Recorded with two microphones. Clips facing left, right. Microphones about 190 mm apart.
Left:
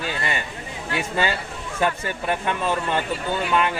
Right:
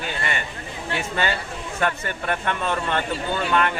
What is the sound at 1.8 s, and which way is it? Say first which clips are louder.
Speech: left 2 dB; 15° left (ahead or behind).